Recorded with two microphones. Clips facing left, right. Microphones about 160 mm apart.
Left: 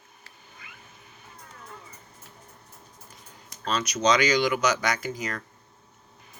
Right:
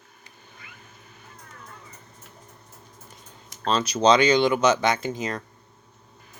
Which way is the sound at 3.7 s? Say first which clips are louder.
Right 5 dB; 30° right (ahead or behind).